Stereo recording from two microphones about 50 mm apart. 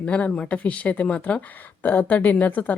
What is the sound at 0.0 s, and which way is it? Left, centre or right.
A woman's voice, left.